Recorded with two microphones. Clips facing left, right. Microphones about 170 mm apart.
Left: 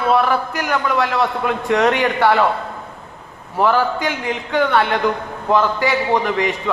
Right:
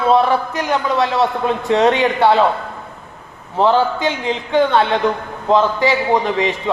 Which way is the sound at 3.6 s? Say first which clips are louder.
Right 2 dB; 20° right (ahead or behind).